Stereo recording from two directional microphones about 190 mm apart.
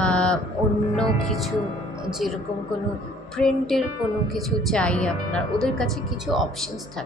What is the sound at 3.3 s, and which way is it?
Speech, centre (ahead or behind).